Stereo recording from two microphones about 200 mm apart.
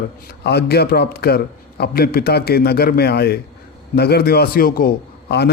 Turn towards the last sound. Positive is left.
turn(degrees=50)  # may be behind; listen again after turning